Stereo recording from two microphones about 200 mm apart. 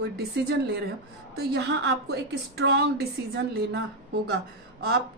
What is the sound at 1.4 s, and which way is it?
A woman's voice, 55° right (ahead or behind).